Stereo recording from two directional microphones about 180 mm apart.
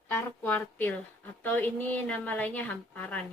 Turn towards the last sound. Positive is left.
turn(degrees=5)  # may be behind; listen again after turning